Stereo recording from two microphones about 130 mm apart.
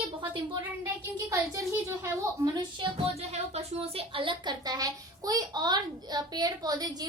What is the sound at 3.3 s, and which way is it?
A woman's voice, 55° right (ahead or behind).